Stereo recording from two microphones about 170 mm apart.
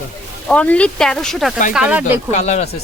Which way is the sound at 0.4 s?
10° left (ahead or behind).